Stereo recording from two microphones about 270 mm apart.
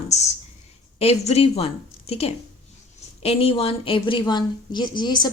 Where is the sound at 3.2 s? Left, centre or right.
Left.